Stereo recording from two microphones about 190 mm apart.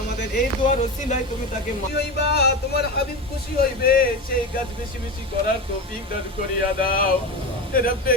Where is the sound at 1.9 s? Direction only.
60° left (ahead or behind).